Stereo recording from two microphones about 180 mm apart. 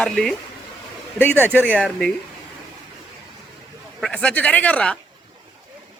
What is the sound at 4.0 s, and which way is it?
Speech, 5° left (ahead or behind).